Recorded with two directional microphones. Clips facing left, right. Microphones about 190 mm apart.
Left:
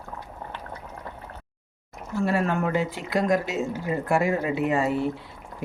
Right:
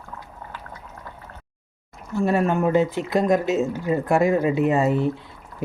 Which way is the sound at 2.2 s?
20° right (ahead or behind).